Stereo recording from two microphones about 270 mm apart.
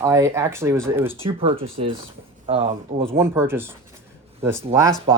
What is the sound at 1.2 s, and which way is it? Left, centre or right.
Speech, centre.